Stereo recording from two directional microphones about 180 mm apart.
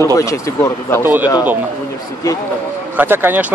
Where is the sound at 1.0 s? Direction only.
10° right (ahead or behind).